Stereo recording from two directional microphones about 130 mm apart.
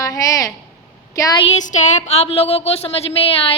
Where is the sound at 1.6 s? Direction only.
65° left (ahead or behind); by 3.5 s 45° left (ahead or behind).